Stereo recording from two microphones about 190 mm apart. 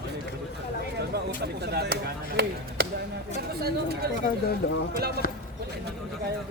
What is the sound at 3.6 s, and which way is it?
Speech, 55° right (ahead or behind).